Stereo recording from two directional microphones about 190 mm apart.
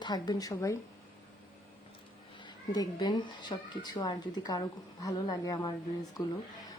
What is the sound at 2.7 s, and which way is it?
Speech, 20° left (ahead or behind).